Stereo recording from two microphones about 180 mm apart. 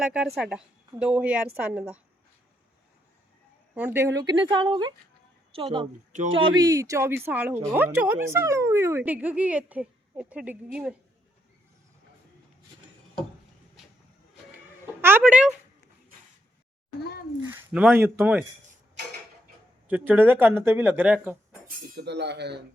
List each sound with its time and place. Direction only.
0.0 s a woman's voice: 5° right (ahead or behind)
3.8 s a woman's voice: 15° right (ahead or behind)
15.0 s speech: 10° right (ahead or behind)
17.5 s speech: 5° right (ahead or behind)
19.9 s speech: 10° right (ahead or behind)
21.9 s speech: 70° right (ahead or behind)